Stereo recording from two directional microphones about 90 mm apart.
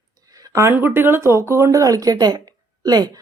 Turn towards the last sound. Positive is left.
turn(degrees=-45)  # may be behind; listen again after turning